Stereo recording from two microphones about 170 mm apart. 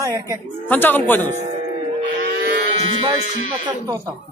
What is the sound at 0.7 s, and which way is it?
Speech, 10° left (ahead or behind).